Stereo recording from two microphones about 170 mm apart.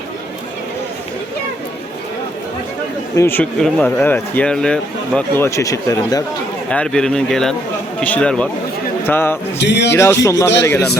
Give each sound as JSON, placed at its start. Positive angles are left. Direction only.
{"t": 3.2, "sound": "speech", "side_deg": 10}
{"t": 5.5, "sound": "speech", "side_deg": 20}
{"t": 6.7, "sound": "speech", "side_deg": 5}
{"t": 9.6, "sound": "a man's voice", "side_deg": 90}
{"t": 9.9, "sound": "speech", "side_deg": 15}